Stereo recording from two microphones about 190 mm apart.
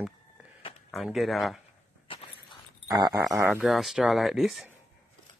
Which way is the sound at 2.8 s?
20° right (ahead or behind).